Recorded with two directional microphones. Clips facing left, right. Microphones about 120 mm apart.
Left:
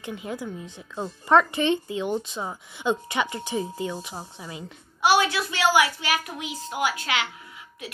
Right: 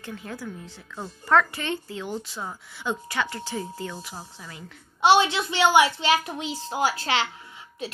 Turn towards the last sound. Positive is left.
turn(degrees=-30)  # may be behind; listen again after turning